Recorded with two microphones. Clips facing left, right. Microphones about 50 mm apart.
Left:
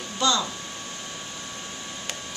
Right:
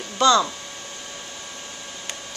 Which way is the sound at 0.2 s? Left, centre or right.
Right.